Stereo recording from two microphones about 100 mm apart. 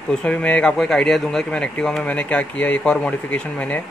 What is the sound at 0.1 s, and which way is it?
Speech, 10° left (ahead or behind).